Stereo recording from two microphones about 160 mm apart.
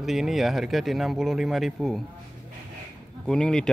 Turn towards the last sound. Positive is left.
turn(degrees=5)  # may be behind; listen again after turning